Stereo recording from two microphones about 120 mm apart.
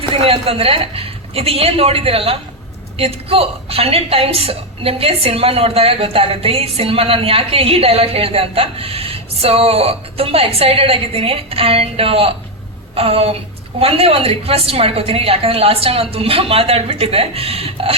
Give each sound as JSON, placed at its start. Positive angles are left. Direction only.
{"t": 0.1, "sound": "a woman's voice", "side_deg": -55}